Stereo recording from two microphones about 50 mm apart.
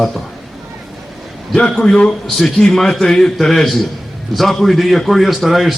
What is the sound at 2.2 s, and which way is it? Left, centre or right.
A man's voice, centre.